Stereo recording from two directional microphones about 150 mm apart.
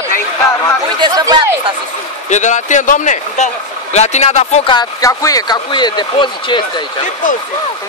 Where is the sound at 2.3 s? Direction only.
55° left (ahead or behind).